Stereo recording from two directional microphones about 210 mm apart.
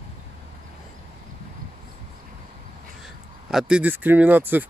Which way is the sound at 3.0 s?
5° right (ahead or behind).